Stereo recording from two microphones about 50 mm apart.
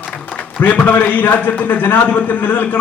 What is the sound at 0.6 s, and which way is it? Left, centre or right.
A man's voice, left.